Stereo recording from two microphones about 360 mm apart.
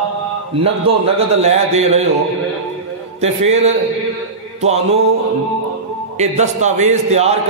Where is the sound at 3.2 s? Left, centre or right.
Centre.